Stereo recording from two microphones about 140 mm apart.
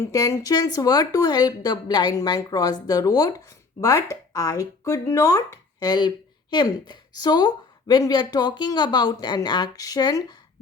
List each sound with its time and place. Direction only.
0.0 s speech: 25° left (ahead or behind)